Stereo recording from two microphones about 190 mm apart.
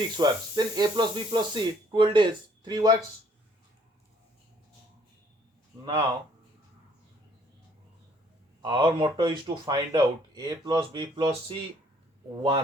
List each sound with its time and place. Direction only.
0.2 s speech: 20° right (ahead or behind)
5.8 s speech: 25° right (ahead or behind)
8.6 s speech: 25° right (ahead or behind)